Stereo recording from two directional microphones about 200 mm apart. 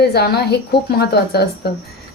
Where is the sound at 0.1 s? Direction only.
55° left (ahead or behind).